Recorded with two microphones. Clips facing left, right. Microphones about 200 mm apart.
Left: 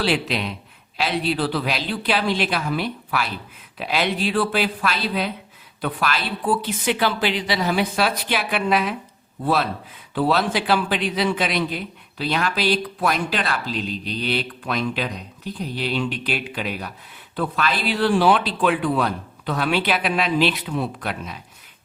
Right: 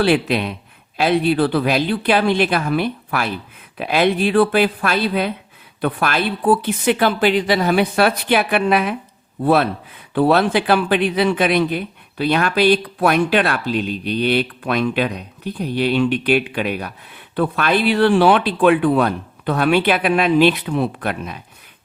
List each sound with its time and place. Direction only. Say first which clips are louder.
0.0 s speech: right 6 dB; 55° right (ahead or behind)